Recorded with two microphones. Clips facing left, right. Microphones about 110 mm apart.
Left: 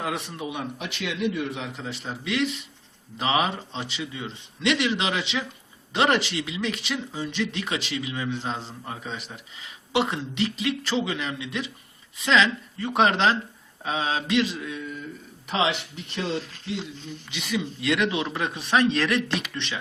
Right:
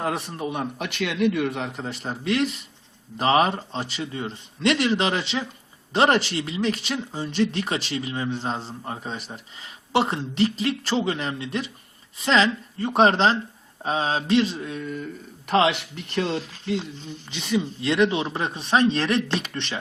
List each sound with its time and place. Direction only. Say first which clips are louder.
0.3 s a man's voice: right 3 dB; 40° right (ahead or behind)
15.4 s speech: right 5 dB; 55° right (ahead or behind)
17.3 s speech: right 4 dB; 30° right (ahead or behind)